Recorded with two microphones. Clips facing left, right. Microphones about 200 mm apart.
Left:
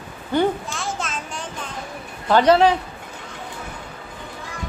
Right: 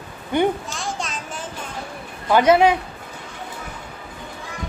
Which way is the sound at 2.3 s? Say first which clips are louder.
Even; 10° right (ahead or behind).